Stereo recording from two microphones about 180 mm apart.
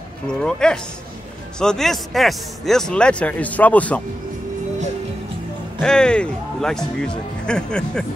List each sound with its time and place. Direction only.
0.3 s speech: 5° left (ahead or behind)
5.8 s speech: 5° left (ahead or behind)